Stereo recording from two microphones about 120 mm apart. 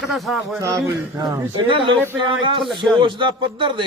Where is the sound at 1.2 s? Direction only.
35° right (ahead or behind).